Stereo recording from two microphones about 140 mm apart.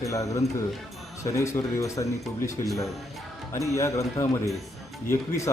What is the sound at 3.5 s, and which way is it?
Speech, 20° left (ahead or behind).